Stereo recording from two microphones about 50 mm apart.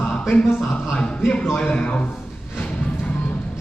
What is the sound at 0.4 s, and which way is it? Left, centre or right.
Speech, left.